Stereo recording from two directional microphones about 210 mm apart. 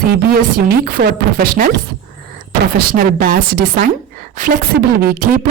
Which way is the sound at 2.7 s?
45° right (ahead or behind).